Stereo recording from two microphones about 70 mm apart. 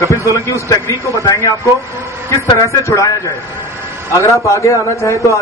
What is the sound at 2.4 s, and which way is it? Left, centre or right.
Speech, left.